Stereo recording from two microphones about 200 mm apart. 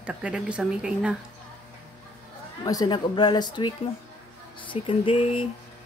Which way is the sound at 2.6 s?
20° left (ahead or behind).